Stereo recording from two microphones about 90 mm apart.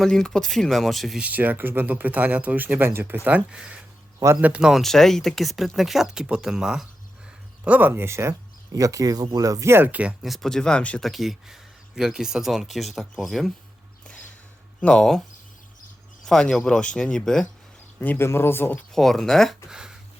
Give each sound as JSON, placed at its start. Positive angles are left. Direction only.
{"t": 0.0, "sound": "speech", "side_deg": 5}
{"t": 1.2, "sound": "speech", "side_deg": -20}
{"t": 3.2, "sound": "speech", "side_deg": -15}
{"t": 4.7, "sound": "speech", "side_deg": 5}
{"t": 7.6, "sound": "speech", "side_deg": -20}
{"t": 10.2, "sound": "speech", "side_deg": 0}
{"t": 11.1, "sound": "speech", "side_deg": 0}
{"t": 14.8, "sound": "speech", "side_deg": 10}
{"t": 16.2, "sound": "speech", "side_deg": 5}
{"t": 18.0, "sound": "speech", "side_deg": 25}
{"t": 18.9, "sound": "speech", "side_deg": 5}
{"t": 19.7, "sound": "a sound", "side_deg": -10}